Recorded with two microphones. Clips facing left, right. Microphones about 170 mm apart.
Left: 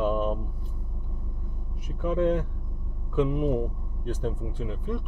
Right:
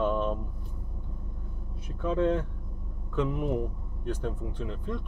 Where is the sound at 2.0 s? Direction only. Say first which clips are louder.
Left 2 dB; 15° left (ahead or behind).